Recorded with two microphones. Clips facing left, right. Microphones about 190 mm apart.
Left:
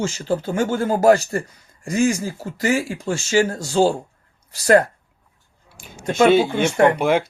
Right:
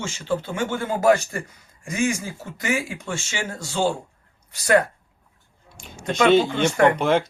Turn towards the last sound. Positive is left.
turn(degrees=10)  # may be behind; listen again after turning